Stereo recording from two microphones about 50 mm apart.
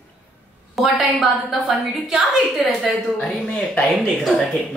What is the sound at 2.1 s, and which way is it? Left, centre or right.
Speech, centre.